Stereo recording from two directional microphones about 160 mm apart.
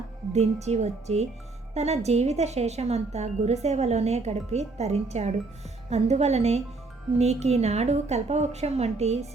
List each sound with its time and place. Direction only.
0.3 s speech: 45° right (ahead or behind)